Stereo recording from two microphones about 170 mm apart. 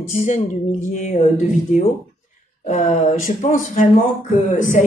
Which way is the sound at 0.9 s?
45° left (ahead or behind).